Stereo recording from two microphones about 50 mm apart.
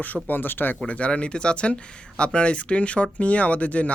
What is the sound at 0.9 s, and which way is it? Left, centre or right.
Speech, left.